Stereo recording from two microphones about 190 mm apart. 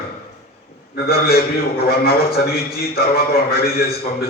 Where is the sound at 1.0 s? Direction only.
55° left (ahead or behind).